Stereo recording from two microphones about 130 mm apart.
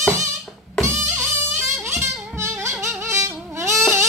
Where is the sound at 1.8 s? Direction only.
20° right (ahead or behind).